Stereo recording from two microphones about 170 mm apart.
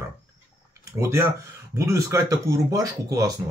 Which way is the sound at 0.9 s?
15° right (ahead or behind).